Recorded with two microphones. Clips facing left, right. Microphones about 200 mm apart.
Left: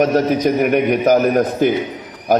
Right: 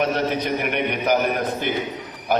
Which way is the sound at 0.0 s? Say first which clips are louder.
Left 8 dB; 40° left (ahead or behind).